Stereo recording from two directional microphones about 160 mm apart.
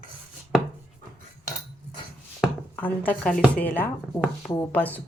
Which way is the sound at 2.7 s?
10° left (ahead or behind).